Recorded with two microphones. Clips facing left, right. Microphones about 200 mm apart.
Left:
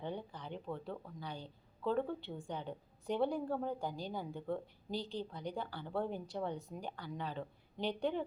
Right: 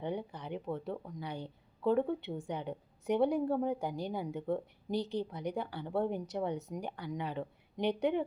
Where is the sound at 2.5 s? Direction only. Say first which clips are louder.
Right 4 dB; 20° right (ahead or behind).